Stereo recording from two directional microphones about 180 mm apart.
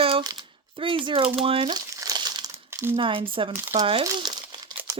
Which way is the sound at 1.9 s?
20° right (ahead or behind).